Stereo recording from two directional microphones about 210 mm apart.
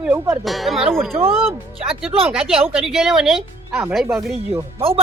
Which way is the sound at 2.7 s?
Centre (ahead or behind).